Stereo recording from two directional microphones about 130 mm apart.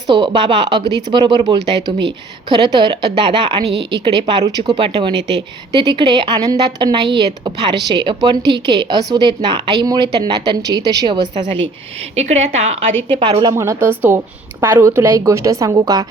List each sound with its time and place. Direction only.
0.1 s speech: 35° right (ahead or behind)
12.1 s a woman's voice: 60° right (ahead or behind); by 13.6 s 35° right (ahead or behind)
13.6 s a woman's voice: 20° right (ahead or behind)